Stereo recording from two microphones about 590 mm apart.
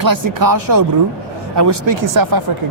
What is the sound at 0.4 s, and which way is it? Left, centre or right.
Speech, right.